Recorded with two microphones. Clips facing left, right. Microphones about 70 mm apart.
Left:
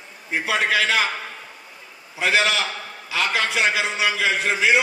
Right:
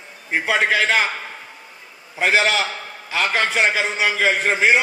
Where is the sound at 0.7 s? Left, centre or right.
Right.